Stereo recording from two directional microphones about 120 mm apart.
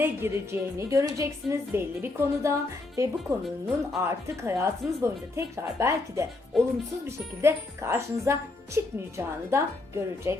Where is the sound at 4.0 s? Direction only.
20° right (ahead or behind).